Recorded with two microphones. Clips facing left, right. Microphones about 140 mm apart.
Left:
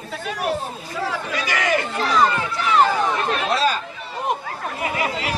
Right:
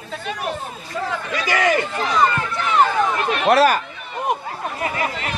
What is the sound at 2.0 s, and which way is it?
Speech, 5° left (ahead or behind).